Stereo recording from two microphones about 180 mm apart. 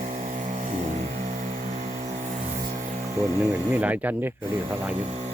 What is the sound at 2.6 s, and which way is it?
Music, 20° right (ahead or behind).